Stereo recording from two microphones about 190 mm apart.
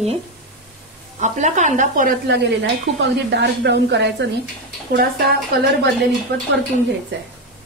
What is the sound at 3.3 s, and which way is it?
Speech, 65° right (ahead or behind).